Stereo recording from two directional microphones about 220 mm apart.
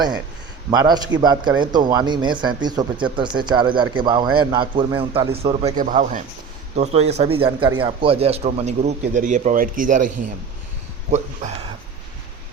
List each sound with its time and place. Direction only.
0.7 s a man's voice: 15° right (ahead or behind)
5.7 s a man's voice: 35° right (ahead or behind)
11.1 s a man's voice: 30° right (ahead or behind)